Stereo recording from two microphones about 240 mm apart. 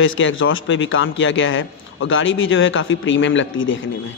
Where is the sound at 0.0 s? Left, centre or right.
Left.